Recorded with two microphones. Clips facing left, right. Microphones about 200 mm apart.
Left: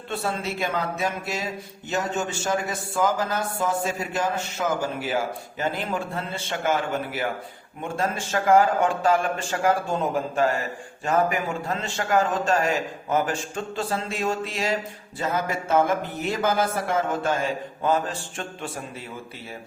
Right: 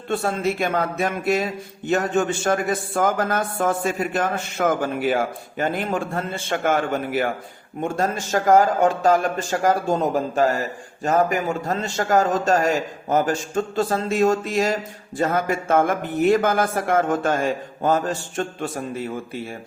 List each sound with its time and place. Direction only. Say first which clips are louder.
0.1 s a man's voice: right 6 dB; 50° right (ahead or behind)